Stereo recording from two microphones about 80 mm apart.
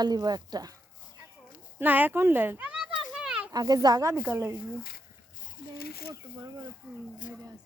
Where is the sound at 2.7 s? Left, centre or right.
Centre.